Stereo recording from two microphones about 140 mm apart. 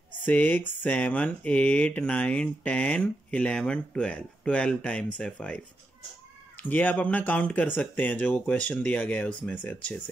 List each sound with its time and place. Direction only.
0.2 s speech: 10° left (ahead or behind)